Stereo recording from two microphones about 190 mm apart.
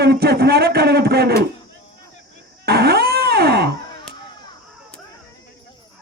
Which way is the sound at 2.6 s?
55° right (ahead or behind).